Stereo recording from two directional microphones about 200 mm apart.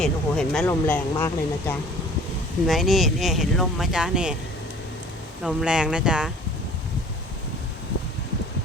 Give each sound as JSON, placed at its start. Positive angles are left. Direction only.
{"t": 0.0, "sound": "speech", "side_deg": 5}
{"t": 2.6, "sound": "speech", "side_deg": 0}
{"t": 5.4, "sound": "speech", "side_deg": -5}